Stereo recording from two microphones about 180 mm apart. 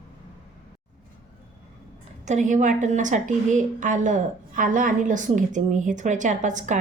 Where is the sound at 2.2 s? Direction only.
40° right (ahead or behind).